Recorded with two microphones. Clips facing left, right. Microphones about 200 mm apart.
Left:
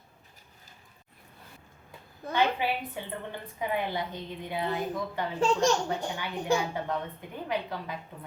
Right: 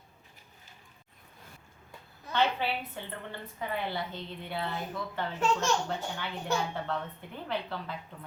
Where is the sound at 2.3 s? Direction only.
15° left (ahead or behind).